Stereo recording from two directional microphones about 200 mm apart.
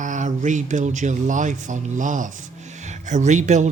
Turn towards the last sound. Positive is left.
turn(degrees=-35)  # may be behind; listen again after turning